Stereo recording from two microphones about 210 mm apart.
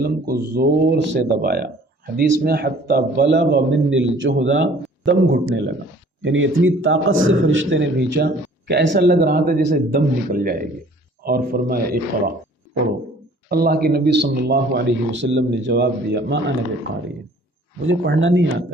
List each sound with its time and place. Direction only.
0.0 s a man's voice: 50° right (ahead or behind)
6.2 s a man's voice: 65° right (ahead or behind); by 12.3 s 45° right (ahead or behind)
13.5 s a man's voice: 45° right (ahead or behind)
17.8 s a man's voice: 60° right (ahead or behind)